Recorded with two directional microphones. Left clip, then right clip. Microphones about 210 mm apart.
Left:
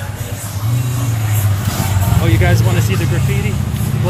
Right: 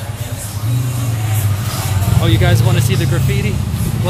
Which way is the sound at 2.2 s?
5° right (ahead or behind).